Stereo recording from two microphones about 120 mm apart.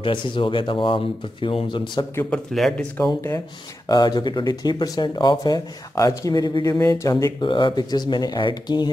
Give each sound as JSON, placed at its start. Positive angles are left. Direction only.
{"t": 0.0, "sound": "speech", "side_deg": 45}
{"t": 2.3, "sound": "speech", "side_deg": 5}
{"t": 3.2, "sound": "speech", "side_deg": 25}
{"t": 3.9, "sound": "speech", "side_deg": 35}
{"t": 7.4, "sound": "speech", "side_deg": 40}